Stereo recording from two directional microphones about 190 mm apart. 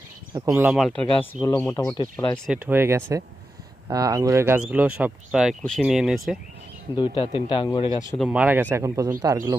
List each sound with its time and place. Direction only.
0.5 s speech: 5° right (ahead or behind)
1.4 s speech: 15° left (ahead or behind)
2.5 s speech: 10° right (ahead or behind)
6.9 s a man's voice: 25° left (ahead or behind)
8.2 s speech: 5° right (ahead or behind)